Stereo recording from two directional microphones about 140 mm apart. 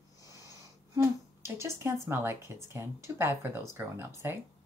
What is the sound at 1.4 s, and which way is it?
Speech, 20° right (ahead or behind).